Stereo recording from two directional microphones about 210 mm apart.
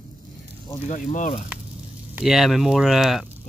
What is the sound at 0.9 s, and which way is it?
Speech, 35° left (ahead or behind).